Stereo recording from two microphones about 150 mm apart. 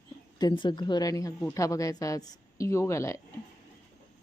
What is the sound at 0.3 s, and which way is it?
A woman's voice, 30° left (ahead or behind).